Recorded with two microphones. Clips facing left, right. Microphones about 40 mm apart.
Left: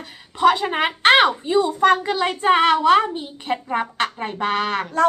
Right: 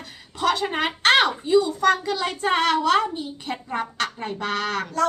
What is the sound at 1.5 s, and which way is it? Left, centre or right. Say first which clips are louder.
A child's voice: left 2 dB; left.